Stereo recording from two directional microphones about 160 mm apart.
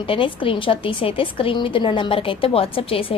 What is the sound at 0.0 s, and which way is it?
A woman's voice, 30° left (ahead or behind).